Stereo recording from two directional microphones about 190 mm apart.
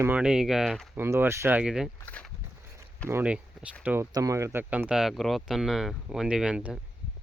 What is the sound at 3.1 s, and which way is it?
Speech, 10° right (ahead or behind).